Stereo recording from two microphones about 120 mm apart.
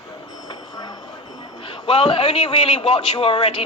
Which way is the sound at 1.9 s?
50° left (ahead or behind).